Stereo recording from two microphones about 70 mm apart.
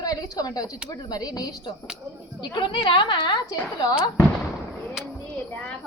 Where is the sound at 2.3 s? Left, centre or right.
Left.